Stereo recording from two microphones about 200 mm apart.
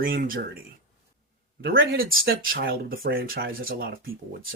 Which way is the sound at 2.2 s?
50° right (ahead or behind).